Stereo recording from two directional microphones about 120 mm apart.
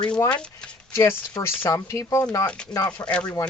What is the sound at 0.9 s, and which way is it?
Speech, 20° left (ahead or behind).